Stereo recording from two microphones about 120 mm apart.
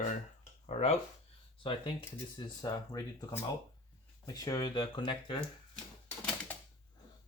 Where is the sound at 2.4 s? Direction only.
35° left (ahead or behind).